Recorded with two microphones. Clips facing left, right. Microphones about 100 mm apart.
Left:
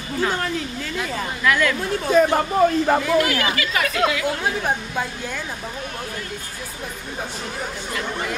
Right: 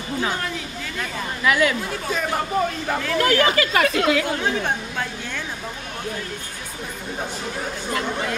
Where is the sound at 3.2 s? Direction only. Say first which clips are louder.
Right 3 dB; 40° right (ahead or behind).